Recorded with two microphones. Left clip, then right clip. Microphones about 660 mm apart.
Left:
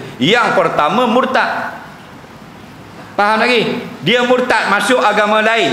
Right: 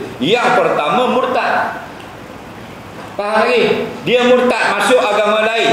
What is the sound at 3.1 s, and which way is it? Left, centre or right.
A man's voice, left.